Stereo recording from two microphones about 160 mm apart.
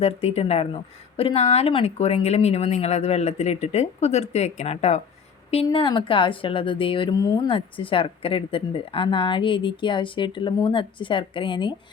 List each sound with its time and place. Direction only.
0.0 s a woman's voice: 40° left (ahead or behind)